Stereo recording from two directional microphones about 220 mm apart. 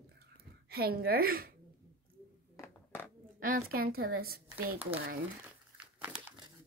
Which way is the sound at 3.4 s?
40° right (ahead or behind).